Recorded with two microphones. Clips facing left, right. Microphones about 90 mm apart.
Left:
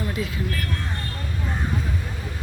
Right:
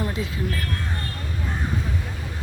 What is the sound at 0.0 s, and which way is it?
Speech, 25° right (ahead or behind).